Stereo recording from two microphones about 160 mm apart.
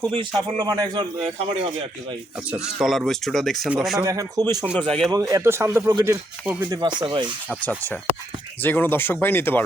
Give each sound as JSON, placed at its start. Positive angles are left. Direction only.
{"t": 0.1, "sound": "speech", "side_deg": -35}
{"t": 2.7, "sound": "speech", "side_deg": -5}
{"t": 4.0, "sound": "speech", "side_deg": -20}
{"t": 4.8, "sound": "speech", "side_deg": 5}
{"t": 5.3, "sound": "speech", "side_deg": -15}
{"t": 6.7, "sound": "speech", "side_deg": -30}
{"t": 7.6, "sound": "speech", "side_deg": 10}